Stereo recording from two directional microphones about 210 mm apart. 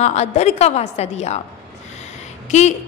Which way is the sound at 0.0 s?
30° left (ahead or behind).